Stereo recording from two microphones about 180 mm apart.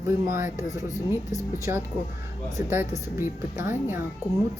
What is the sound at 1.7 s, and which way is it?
Speech, 15° right (ahead or behind).